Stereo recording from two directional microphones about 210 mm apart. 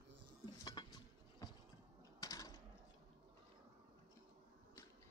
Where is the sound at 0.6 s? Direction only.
20° left (ahead or behind).